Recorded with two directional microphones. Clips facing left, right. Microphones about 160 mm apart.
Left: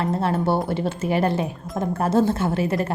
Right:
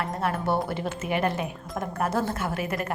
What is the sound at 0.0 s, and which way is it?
A woman's voice, 30° left (ahead or behind).